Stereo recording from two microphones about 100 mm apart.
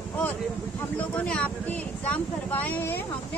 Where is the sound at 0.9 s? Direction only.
10° left (ahead or behind).